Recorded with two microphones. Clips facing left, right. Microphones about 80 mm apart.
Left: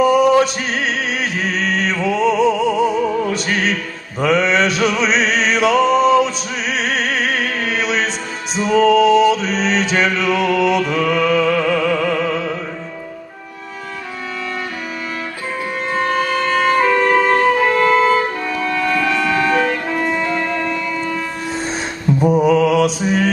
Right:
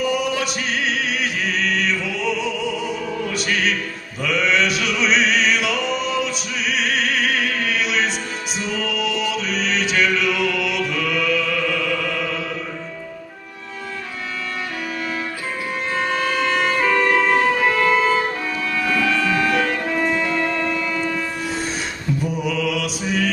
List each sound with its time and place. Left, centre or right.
0.0 s music: left
16.1 s music: centre
16.7 s music: centre
19.0 s music: centre
22.2 s mantra: left